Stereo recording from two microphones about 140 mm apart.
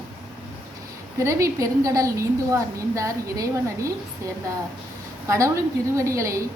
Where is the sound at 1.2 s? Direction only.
20° right (ahead or behind).